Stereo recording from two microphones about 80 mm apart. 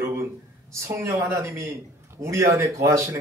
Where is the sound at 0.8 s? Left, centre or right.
Right.